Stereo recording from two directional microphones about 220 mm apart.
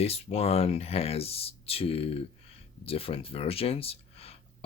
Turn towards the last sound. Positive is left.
turn(degrees=25)  # may be behind; listen again after turning